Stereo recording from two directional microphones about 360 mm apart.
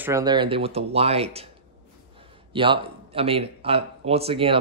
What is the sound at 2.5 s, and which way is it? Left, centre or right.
Speech, centre.